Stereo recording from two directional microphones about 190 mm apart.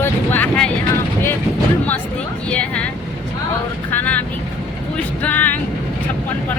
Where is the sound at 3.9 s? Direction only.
10° left (ahead or behind).